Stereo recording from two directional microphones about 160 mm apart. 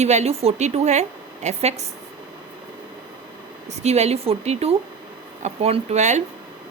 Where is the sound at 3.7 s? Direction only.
45° right (ahead or behind).